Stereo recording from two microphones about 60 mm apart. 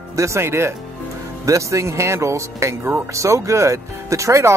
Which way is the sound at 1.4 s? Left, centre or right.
Right.